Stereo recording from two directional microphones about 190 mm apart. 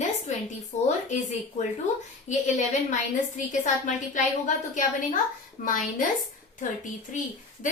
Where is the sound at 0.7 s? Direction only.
35° left (ahead or behind).